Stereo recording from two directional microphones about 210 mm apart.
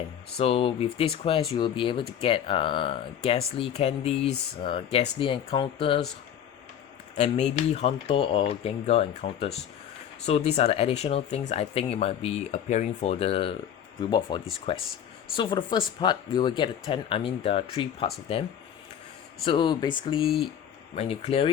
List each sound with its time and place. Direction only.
0.3 s speech: 30° left (ahead or behind)
7.7 s speech: 30° left (ahead or behind)
19.5 s speech: 20° left (ahead or behind)